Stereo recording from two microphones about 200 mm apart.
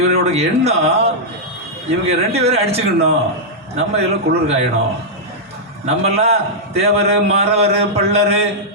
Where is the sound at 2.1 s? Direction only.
30° right (ahead or behind).